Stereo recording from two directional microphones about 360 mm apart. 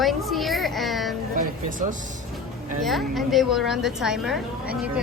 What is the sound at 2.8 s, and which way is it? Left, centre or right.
A child's voice, centre.